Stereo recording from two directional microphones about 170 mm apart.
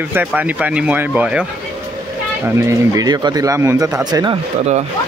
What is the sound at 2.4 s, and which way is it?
Speech, 20° right (ahead or behind).